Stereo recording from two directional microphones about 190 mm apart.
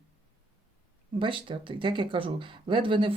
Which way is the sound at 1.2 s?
25° right (ahead or behind).